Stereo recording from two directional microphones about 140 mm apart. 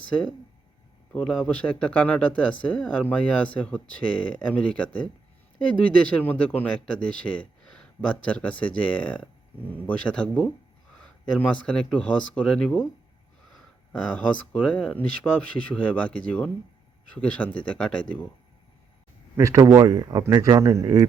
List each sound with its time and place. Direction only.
1.1 s speech: 5° left (ahead or behind)
14.2 s speech: 10° left (ahead or behind)
19.4 s speech: 25° right (ahead or behind)